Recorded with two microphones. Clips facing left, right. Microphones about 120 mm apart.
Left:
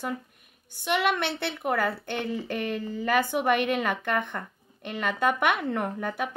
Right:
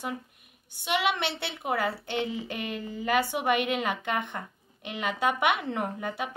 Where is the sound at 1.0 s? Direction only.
50° left (ahead or behind).